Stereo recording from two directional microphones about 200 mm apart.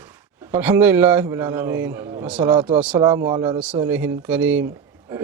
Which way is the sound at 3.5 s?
5° right (ahead or behind).